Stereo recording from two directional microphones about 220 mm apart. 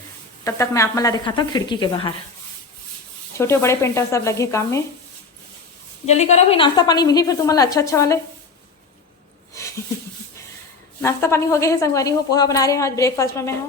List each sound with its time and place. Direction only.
0.4 s speech: 15° left (ahead or behind)
3.3 s a woman's voice: 10° left (ahead or behind)
6.1 s a woman's voice: 30° left (ahead or behind); by 8.2 s 15° left (ahead or behind)
9.6 s a sound: 15° left (ahead or behind)
11.0 s a woman's voice: 10° left (ahead or behind)